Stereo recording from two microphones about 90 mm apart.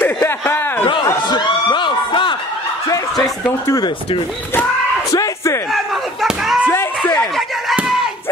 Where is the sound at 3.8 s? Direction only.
70° left (ahead or behind).